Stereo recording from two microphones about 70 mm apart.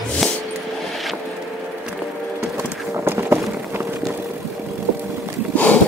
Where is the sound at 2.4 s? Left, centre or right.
Right.